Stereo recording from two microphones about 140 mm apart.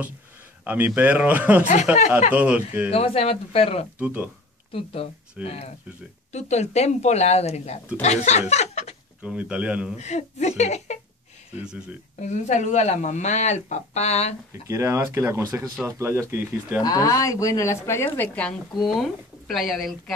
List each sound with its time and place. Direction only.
0.7 s speech: 10° right (ahead or behind)
2.0 s speech: 55° left (ahead or behind)
2.3 s speech: 10° right (ahead or behind)
2.9 s speech: 45° left (ahead or behind)
4.0 s speech: 10° right (ahead or behind)
4.7 s speech: 45° left (ahead or behind)
9.2 s speech: 10° right (ahead or behind)
9.9 s speech: 55° left (ahead or behind)
11.6 s speech: 5° right (ahead or behind)
12.2 s speech: 55° left (ahead or behind)
14.5 s speech: 20° right (ahead or behind)
16.8 s a woman's voice: 25° left (ahead or behind); by 18.6 s 10° left (ahead or behind)
18.8 s speech: centre (ahead or behind)